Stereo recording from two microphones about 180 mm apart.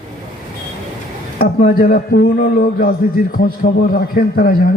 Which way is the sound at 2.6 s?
50° left (ahead or behind).